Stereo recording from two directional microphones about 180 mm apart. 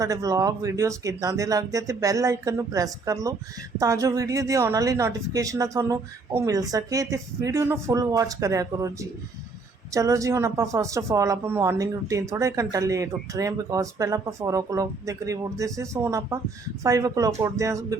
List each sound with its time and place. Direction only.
0.0 s speech: 20° right (ahead or behind)